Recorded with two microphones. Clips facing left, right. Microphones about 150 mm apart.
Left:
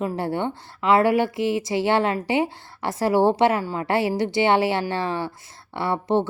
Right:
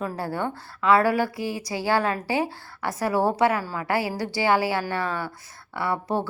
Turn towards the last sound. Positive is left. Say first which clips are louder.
# left 4 dB
turn(degrees=25)  # may be behind; listen again after turning